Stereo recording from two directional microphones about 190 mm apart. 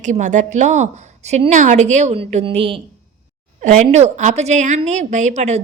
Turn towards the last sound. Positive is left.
turn(degrees=-35)  # may be behind; listen again after turning